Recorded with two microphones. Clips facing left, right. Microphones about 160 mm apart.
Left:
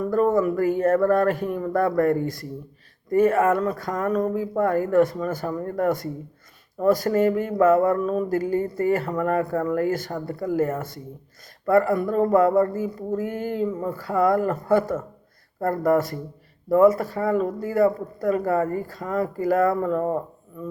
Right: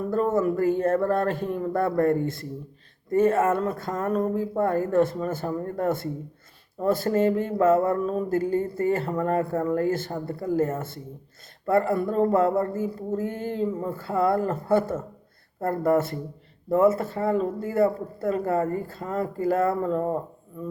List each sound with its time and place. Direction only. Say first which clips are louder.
0.3 s speech: left 1 dB; 25° right (ahead or behind)